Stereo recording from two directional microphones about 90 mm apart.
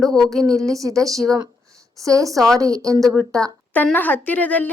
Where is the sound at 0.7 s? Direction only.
40° right (ahead or behind).